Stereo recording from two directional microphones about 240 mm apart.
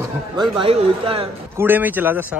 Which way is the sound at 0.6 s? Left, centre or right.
Right.